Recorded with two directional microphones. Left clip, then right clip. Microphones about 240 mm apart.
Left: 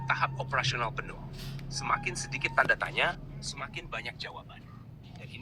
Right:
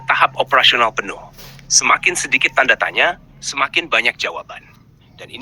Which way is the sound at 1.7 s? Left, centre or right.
Right.